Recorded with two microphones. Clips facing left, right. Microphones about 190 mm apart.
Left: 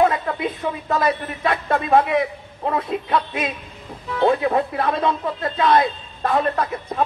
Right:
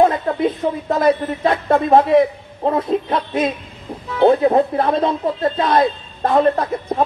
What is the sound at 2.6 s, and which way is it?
Speech, 30° right (ahead or behind).